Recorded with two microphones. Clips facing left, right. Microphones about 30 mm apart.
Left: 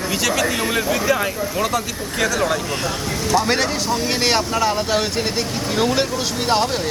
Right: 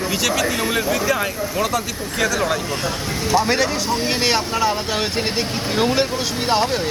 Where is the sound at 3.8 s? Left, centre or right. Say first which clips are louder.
Even; right.